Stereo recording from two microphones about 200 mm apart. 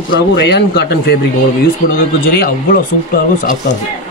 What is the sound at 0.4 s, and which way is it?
Speech, 60° left (ahead or behind).